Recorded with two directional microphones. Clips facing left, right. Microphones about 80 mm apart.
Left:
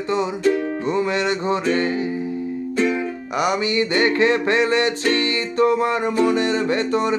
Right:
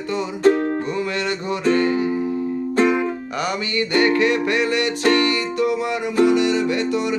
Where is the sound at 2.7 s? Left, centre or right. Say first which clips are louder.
Right 3 dB; right.